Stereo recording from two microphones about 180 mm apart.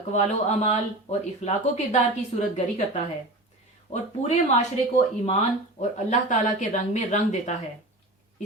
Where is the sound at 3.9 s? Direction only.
40° left (ahead or behind).